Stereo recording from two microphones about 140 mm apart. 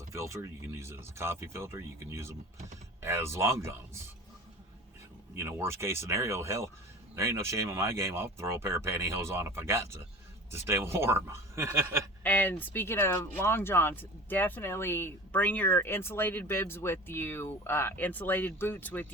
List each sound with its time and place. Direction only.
0.1 s speech: 20° right (ahead or behind)
5.3 s speech: 20° right (ahead or behind)
12.2 s speech: 10° left (ahead or behind)